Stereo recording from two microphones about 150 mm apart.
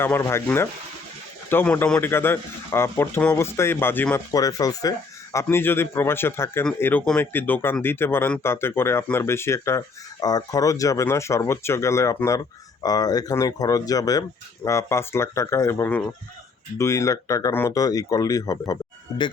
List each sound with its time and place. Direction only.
0.0 s speech: 15° left (ahead or behind)